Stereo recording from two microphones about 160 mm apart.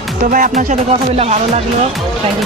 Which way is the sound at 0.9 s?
40° right (ahead or behind).